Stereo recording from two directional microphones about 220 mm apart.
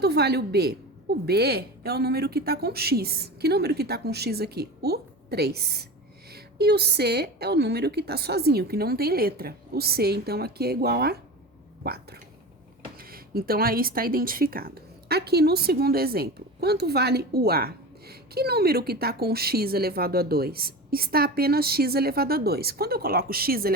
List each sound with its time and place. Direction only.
0.0 s a woman's voice: 45° right (ahead or behind)